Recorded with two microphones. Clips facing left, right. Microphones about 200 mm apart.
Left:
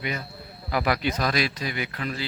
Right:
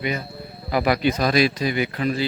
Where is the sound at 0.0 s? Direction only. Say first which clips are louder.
Right 5 dB; 15° right (ahead or behind).